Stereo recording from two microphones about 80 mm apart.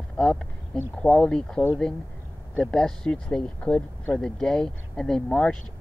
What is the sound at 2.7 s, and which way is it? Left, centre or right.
Speech, centre.